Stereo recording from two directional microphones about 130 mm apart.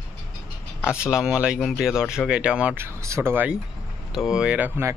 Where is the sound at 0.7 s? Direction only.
20° left (ahead or behind).